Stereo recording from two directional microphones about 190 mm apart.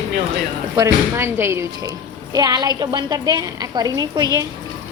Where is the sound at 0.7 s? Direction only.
15° right (ahead or behind).